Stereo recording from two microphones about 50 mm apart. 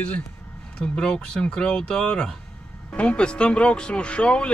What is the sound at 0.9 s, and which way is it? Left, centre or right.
Speech, centre.